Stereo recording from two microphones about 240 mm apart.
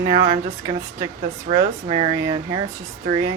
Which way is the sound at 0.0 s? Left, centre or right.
Right.